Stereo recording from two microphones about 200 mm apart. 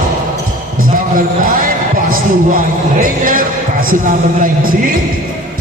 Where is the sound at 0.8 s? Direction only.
45° right (ahead or behind).